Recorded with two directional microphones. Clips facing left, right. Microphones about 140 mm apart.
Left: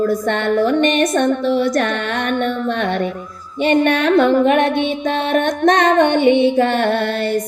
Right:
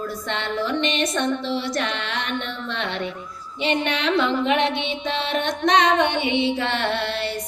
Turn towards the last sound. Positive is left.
turn(degrees=50)  # may be behind; listen again after turning